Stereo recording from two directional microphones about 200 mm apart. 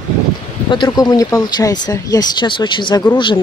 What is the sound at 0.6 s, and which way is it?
Speech, 25° left (ahead or behind).